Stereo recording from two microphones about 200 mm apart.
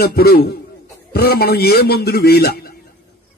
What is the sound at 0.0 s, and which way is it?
A man's voice, 50° left (ahead or behind).